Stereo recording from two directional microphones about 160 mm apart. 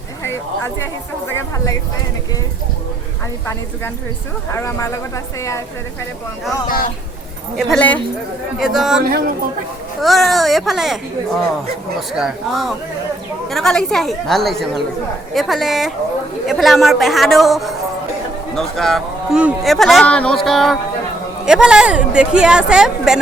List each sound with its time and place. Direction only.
0.2 s speech: 15° left (ahead or behind)
4.5 s speech: 15° left (ahead or behind)
6.7 s speech: 60° left (ahead or behind)
7.5 s speech: centre (ahead or behind)
8.5 s speech: centre (ahead or behind)